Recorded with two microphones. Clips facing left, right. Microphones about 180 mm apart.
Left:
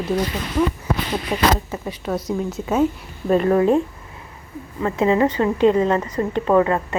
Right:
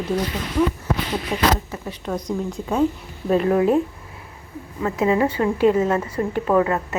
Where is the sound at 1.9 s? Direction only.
5° left (ahead or behind).